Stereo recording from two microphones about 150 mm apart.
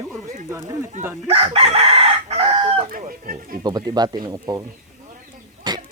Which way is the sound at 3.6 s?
25° right (ahead or behind).